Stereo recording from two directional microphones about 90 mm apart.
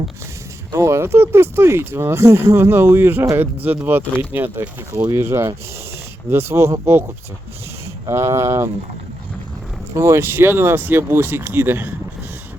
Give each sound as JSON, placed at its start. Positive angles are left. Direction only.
{"t": 0.7, "sound": "speech", "side_deg": -35}
{"t": 8.0, "sound": "speech", "side_deg": -30}
{"t": 9.9, "sound": "speech", "side_deg": -30}